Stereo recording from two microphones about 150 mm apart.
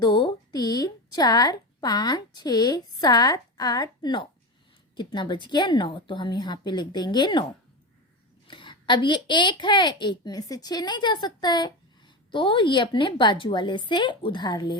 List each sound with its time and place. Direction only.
0.0 s a woman's voice: 30° left (ahead or behind)
8.4 s a woman's voice: 30° left (ahead or behind)